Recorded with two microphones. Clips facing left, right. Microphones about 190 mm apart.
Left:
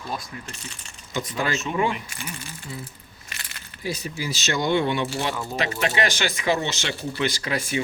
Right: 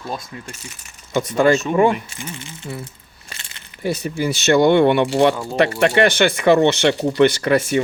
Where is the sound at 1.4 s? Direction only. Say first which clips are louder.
Right 11 dB; 45° right (ahead or behind).